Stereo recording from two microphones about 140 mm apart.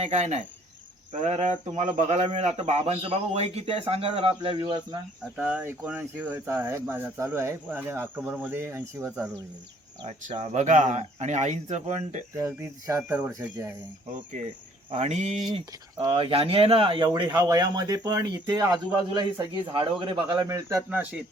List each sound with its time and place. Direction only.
0.0 s speech: 55° right (ahead or behind); by 4.9 s 35° right (ahead or behind)
5.4 s speech: 10° right (ahead or behind)
10.1 s speech: 55° right (ahead or behind)
12.4 s speech: 20° right (ahead or behind)
14.9 s speech: 55° right (ahead or behind)
15.4 s speech: 35° right (ahead or behind)
20.5 s speech: 20° right (ahead or behind)